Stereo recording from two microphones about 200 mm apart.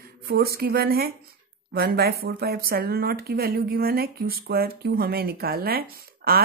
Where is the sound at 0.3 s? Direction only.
50° right (ahead or behind).